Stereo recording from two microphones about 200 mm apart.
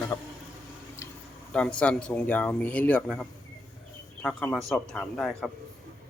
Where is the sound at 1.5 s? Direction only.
5° left (ahead or behind).